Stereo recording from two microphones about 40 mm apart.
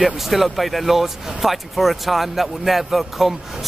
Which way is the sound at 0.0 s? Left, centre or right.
Centre.